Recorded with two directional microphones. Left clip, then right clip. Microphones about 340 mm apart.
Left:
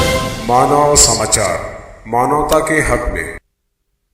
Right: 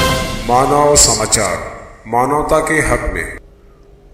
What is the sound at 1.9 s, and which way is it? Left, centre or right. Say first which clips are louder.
A man's voice: even; centre.